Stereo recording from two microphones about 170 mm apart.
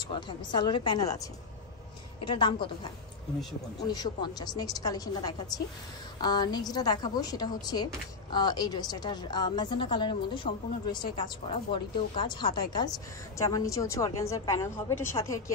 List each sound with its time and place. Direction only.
0.1 s a woman's voice: 25° left (ahead or behind)
2.2 s a woman's voice: 30° left (ahead or behind)